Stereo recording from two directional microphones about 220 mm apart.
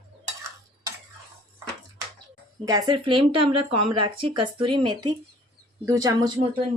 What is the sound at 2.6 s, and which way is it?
Speech, 15° right (ahead or behind).